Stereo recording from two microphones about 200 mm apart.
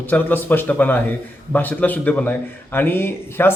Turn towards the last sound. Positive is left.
turn(degrees=10)  # may be behind; listen again after turning